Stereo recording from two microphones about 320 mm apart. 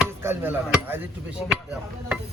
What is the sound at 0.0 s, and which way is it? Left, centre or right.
Speech, centre.